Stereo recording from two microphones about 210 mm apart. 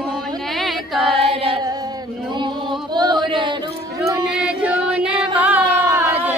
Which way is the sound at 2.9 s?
20° right (ahead or behind).